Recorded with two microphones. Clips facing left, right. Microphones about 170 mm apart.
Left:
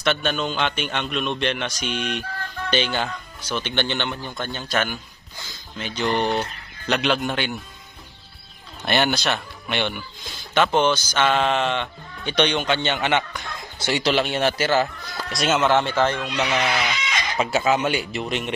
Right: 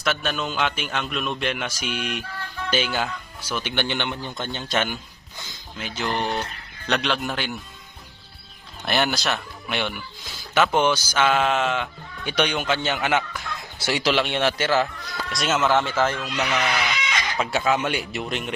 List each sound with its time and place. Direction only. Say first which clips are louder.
0.0 s a man's voice: left 3 dB; centre (ahead or behind); by 4.9 s 20° right (ahead or behind)
5.7 s speech: left 4 dB; 5° right (ahead or behind)
8.8 s speech: left 2 dB; centre (ahead or behind)